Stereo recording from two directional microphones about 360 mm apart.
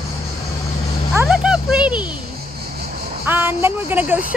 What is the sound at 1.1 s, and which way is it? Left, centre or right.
Speech, centre.